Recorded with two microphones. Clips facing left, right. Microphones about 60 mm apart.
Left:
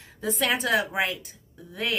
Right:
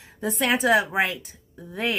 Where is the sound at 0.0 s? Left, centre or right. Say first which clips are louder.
Right 2 dB; centre.